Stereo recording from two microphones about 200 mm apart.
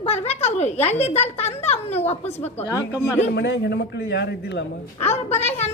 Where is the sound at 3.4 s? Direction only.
60° left (ahead or behind).